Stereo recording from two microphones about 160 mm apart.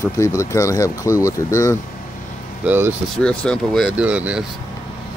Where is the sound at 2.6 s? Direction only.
15° right (ahead or behind).